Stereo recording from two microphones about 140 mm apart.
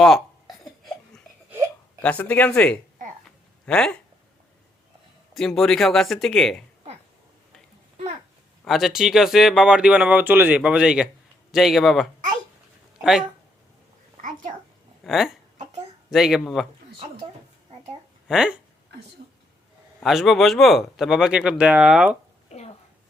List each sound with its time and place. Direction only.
0.0 s a sound: centre (ahead or behind)
2.0 s speech: 10° left (ahead or behind)
5.3 s speech: 5° left (ahead or behind)
8.6 s speech: centre (ahead or behind)
14.2 s a sound: 65° right (ahead or behind)
15.0 s speech: centre (ahead or behind)
18.3 s speech: 5° right (ahead or behind)
20.0 s speech: centre (ahead or behind)